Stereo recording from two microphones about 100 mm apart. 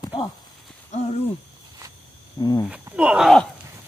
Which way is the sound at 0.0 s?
50° left (ahead or behind).